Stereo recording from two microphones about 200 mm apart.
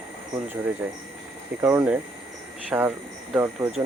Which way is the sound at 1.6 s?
5° right (ahead or behind).